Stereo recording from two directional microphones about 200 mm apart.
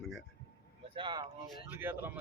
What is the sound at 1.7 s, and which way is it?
Speech, 10° right (ahead or behind).